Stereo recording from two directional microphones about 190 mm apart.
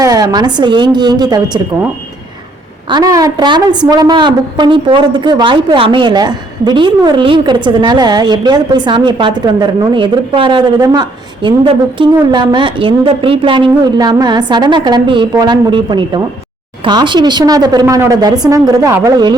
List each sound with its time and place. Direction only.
0.0 s a woman's voice: 20° right (ahead or behind)
2.9 s a woman's voice: 20° right (ahead or behind)